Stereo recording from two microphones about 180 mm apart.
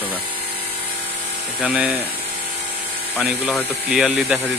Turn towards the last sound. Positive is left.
turn(degrees=-5)  # may be behind; listen again after turning